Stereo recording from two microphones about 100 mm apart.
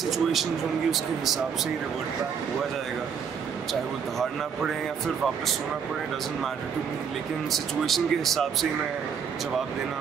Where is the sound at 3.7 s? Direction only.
Centre (ahead or behind).